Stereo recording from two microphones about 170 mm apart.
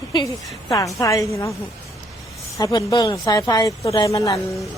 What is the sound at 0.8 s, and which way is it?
Speech, 20° left (ahead or behind).